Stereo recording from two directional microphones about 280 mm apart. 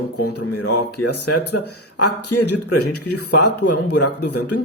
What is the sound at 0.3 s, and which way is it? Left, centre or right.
Speech, left.